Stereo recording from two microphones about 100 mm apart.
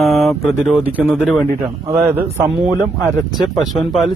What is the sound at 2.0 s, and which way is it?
Speech, 25° right (ahead or behind).